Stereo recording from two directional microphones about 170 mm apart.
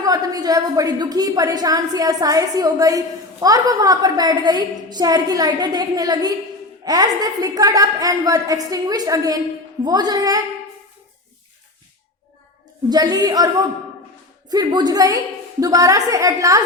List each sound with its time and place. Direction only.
0.0 s a woman's voice: 20° right (ahead or behind)
12.9 s a woman's voice: 25° right (ahead or behind)
14.5 s a woman's voice: 25° right (ahead or behind)